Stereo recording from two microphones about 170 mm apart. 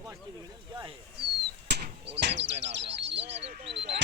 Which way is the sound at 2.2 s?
90° right.